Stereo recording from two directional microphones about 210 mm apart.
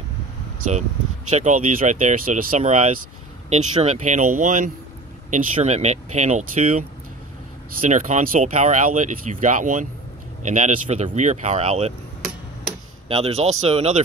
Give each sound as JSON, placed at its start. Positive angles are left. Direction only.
{"t": 1.3, "sound": "speech", "side_deg": -35}
{"t": 7.8, "sound": "speech", "side_deg": -35}
{"t": 13.1, "sound": "speech", "side_deg": -30}